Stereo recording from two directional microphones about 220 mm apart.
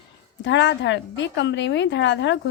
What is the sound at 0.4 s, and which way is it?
A woman's voice, 55° left (ahead or behind).